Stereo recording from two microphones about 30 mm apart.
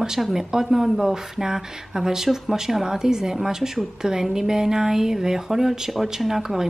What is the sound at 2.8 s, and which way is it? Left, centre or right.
A woman's voice, right.